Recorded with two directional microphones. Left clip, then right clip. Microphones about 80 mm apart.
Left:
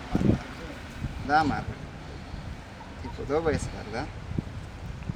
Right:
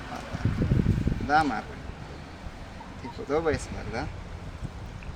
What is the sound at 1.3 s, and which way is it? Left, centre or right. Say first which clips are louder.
Speech: even; centre.